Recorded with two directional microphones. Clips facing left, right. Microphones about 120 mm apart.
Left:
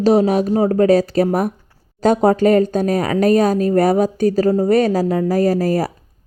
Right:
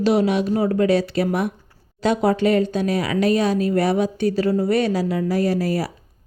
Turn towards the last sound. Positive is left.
turn(degrees=45)  # may be behind; listen again after turning